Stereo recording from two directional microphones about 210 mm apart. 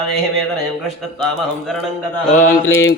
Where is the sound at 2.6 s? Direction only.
65° left (ahead or behind).